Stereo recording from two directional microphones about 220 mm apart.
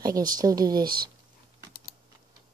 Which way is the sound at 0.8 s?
45° right (ahead or behind).